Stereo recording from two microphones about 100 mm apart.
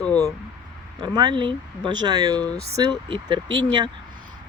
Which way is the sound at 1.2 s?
50° right (ahead or behind).